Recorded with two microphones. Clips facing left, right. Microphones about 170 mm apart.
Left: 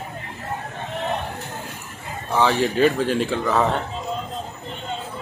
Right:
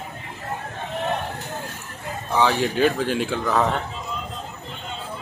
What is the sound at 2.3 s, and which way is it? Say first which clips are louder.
Speech: left 1 dB; centre (ahead or behind).